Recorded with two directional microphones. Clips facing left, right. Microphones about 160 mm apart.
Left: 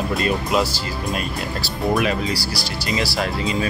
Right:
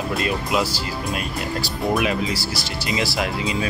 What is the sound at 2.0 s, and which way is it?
Speech, 20° right (ahead or behind).